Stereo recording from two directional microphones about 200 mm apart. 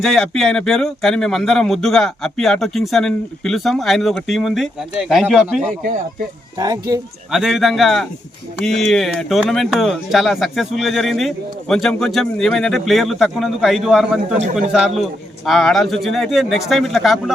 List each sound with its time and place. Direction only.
0.0 s speech: centre (ahead or behind)
6.6 s speech: 15° right (ahead or behind)
7.3 s speech: centre (ahead or behind)